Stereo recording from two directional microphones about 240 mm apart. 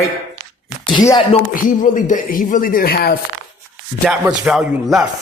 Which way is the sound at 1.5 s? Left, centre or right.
Left.